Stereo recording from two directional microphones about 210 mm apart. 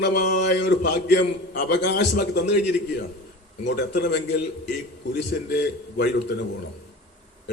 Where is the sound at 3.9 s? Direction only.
50° left (ahead or behind).